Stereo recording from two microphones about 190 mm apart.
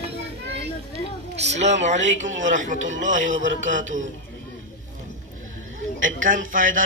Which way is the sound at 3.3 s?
80° right.